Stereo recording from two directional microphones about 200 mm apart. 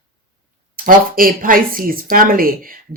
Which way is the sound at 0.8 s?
45° right (ahead or behind).